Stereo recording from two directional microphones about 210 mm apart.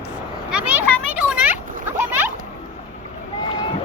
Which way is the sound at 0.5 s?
5° right (ahead or behind).